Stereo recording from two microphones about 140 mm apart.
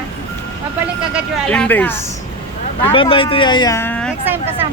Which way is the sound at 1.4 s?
10° left (ahead or behind).